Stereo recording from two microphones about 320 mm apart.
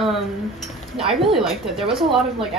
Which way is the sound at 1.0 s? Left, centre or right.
Centre.